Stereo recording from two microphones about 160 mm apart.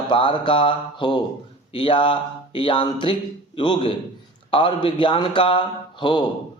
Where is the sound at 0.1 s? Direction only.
30° left (ahead or behind).